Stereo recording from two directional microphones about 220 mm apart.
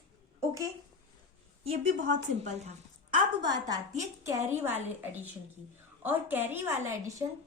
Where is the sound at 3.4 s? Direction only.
15° right (ahead or behind).